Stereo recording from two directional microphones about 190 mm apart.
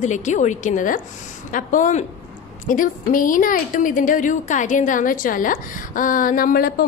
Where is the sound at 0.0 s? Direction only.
40° left (ahead or behind).